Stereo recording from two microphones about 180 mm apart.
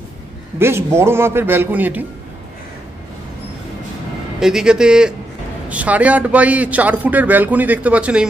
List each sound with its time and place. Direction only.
0.6 s a man's voice: 15° right (ahead or behind)
4.4 s a man's voice: 5° right (ahead or behind)